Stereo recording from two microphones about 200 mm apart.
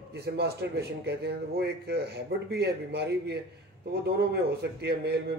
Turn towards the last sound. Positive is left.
turn(degrees=-55)  # may be behind; listen again after turning